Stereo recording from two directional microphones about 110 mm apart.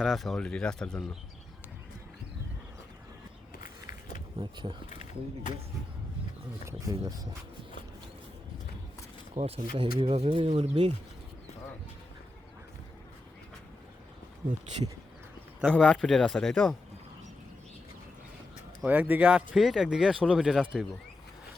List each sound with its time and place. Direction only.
0.0 s speech: centre (ahead or behind)
4.4 s speech: 40° right (ahead or behind)
6.7 s speech: 30° right (ahead or behind)
9.3 s speech: 55° right (ahead or behind)
15.7 s speech: 10° left (ahead or behind)
18.9 s speech: 15° right (ahead or behind)